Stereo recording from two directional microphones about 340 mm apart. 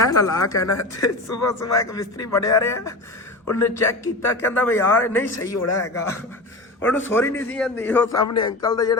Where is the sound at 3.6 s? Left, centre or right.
Left.